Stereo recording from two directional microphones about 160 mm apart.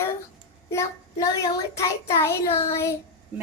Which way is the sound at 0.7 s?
20° left (ahead or behind).